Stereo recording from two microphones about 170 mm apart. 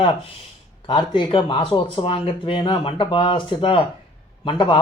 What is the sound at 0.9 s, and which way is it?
Speech, 30° left (ahead or behind).